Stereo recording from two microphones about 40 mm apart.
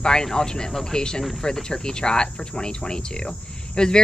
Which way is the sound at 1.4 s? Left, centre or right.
Centre.